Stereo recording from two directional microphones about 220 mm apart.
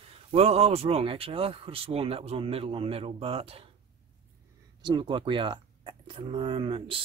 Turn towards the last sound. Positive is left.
turn(degrees=-25)  # may be behind; listen again after turning